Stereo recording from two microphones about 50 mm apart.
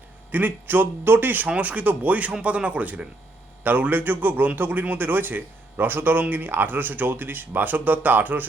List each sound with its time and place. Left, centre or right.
0.3 s speech: right
1.5 s a man's voice: right
3.6 s a man's voice: right